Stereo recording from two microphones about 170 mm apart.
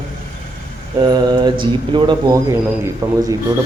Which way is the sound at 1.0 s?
25° right (ahead or behind).